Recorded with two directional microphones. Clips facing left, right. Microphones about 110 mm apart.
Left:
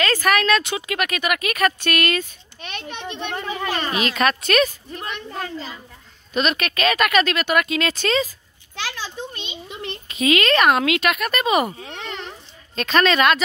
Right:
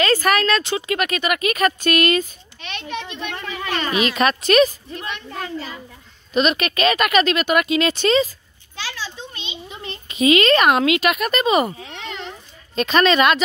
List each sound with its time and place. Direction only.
0.0 s speech: centre (ahead or behind)
2.6 s a child's voice: 40° left (ahead or behind)
3.9 s speech: 5° right (ahead or behind)
6.3 s speech: 5° right (ahead or behind)
8.7 s a sound: 55° left (ahead or behind)
10.0 s speech: centre (ahead or behind)
11.8 s a sound: 45° left (ahead or behind)
12.7 s speech: 5° right (ahead or behind)